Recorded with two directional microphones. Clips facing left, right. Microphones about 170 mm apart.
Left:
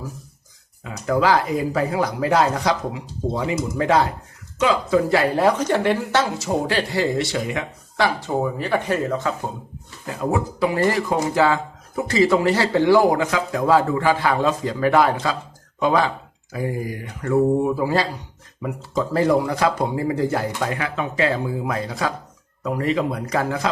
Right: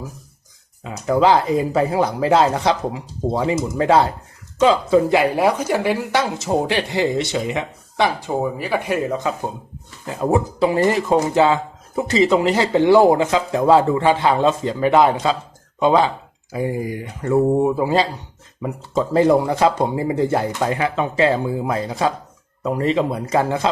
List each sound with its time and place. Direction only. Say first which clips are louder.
0.9 s speech: right 3 dB; 25° right (ahead or behind)
10.1 s speech: right 4 dB; 25° right (ahead or behind)